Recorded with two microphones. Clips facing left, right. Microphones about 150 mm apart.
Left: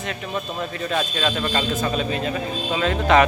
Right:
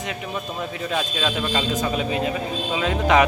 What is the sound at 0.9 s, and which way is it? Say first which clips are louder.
A man's voice: left 1 dB; 5° right (ahead or behind).